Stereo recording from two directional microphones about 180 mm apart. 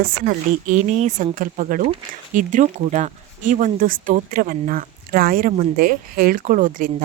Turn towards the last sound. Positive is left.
turn(degrees=-50)  # may be behind; listen again after turning